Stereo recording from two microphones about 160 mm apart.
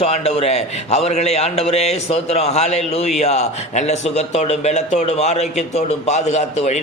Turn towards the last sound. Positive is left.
turn(degrees=45)  # may be behind; listen again after turning